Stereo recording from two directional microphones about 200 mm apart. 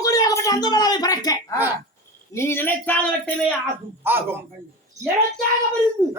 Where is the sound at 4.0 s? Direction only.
10° right (ahead or behind).